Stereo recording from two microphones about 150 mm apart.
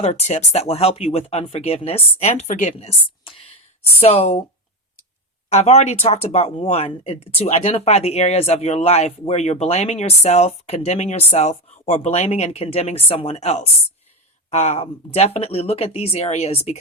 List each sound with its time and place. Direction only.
0.0 s speech: 45° left (ahead or behind)
5.5 s speech: 50° left (ahead or behind)